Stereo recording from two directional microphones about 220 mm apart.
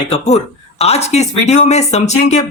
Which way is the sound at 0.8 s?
30° left (ahead or behind).